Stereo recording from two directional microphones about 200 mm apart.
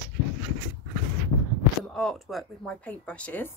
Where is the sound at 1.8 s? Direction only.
5° left (ahead or behind).